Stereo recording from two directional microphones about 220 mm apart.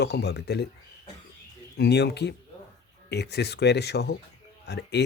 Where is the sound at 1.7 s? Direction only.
50° left (ahead or behind).